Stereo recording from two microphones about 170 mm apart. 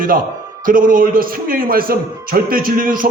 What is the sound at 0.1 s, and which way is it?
A man's voice, 55° right (ahead or behind).